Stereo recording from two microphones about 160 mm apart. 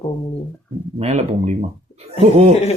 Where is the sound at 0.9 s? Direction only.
40° right (ahead or behind).